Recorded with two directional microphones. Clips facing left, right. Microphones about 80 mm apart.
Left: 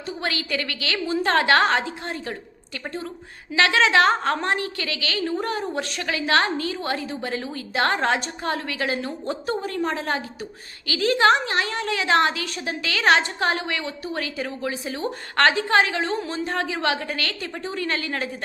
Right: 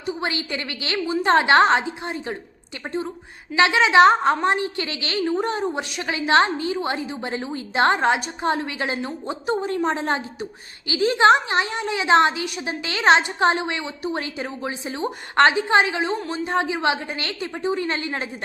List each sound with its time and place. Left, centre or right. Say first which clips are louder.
0.0 s a woman's voice: right 2 dB; right
0.9 s a woman's voice: right 3 dB; centre